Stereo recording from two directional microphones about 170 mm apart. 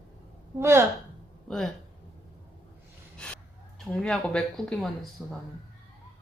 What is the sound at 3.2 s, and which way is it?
Gasp, 5° left (ahead or behind).